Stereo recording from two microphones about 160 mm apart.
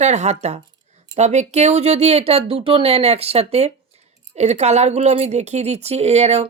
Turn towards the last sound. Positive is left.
turn(degrees=-40)  # may be behind; listen again after turning